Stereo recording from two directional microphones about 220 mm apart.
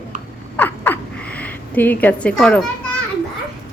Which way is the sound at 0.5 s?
10° left (ahead or behind).